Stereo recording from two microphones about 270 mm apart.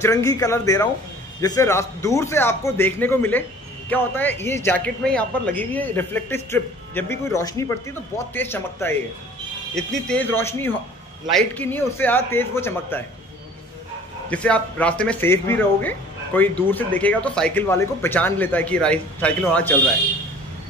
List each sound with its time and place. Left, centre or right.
0.0 s speech: centre
14.3 s speech: centre